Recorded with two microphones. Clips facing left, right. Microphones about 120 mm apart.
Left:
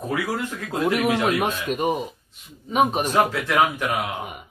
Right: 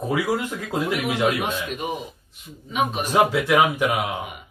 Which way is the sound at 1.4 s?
40° left (ahead or behind).